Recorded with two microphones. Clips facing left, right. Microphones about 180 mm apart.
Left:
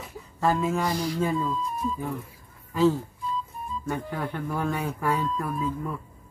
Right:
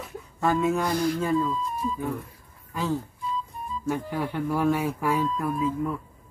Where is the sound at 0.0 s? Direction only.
Centre (ahead or behind).